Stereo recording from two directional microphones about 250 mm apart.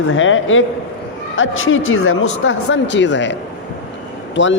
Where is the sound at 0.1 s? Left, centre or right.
Left.